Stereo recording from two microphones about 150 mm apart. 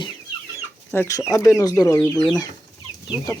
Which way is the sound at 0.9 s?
15° left (ahead or behind).